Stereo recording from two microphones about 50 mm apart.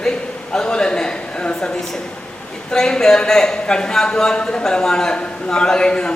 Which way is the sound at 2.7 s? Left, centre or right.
Centre.